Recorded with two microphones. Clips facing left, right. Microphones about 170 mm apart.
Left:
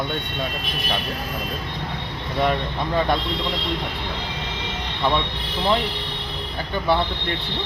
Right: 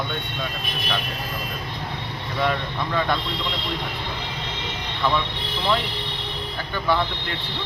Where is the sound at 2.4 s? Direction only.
35° left (ahead or behind).